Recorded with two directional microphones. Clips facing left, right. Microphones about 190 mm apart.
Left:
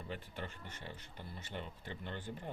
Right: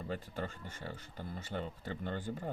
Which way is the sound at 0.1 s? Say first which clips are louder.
Right 6 dB; 40° right (ahead or behind).